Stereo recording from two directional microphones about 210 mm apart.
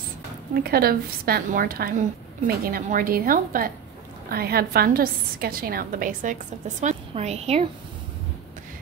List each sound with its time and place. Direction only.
0.7 s a woman's voice: 45° right (ahead or behind)